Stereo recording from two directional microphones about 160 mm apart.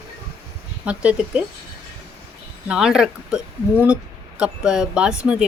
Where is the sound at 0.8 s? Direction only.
5° right (ahead or behind).